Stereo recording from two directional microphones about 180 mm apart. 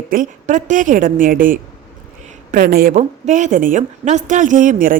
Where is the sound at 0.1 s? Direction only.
45° right (ahead or behind).